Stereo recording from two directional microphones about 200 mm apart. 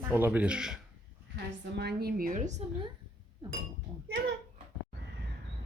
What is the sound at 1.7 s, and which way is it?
Speech, 55° right (ahead or behind).